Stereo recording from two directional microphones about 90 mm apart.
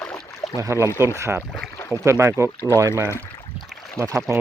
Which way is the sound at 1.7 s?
30° left (ahead or behind).